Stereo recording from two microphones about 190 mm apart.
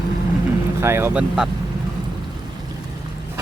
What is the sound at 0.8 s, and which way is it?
Speech, 15° right (ahead or behind).